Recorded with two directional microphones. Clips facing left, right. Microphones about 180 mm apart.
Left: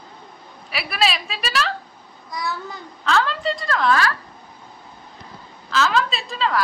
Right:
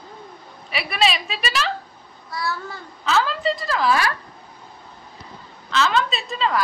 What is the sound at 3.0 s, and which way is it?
Speech, 5° right (ahead or behind).